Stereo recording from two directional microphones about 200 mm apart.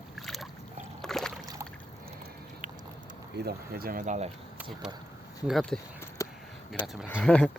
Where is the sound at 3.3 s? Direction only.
55° right (ahead or behind); by 4.3 s 35° right (ahead or behind).